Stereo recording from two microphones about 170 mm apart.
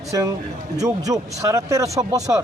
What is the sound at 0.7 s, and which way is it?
Speech, 20° right (ahead or behind).